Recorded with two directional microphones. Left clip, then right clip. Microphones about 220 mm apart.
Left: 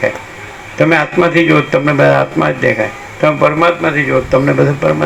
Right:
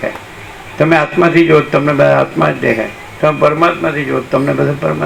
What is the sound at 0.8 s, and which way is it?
A man's voice, 55° left (ahead or behind).